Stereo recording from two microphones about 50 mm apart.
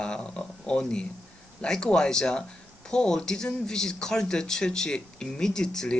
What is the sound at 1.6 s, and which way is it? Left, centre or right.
Speech, centre.